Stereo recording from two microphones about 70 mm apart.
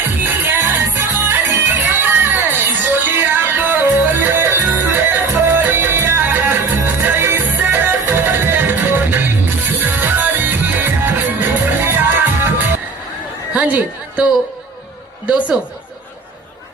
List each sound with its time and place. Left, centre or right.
0.2 s music: right
13.5 s a sound: centre
15.3 s snicker: centre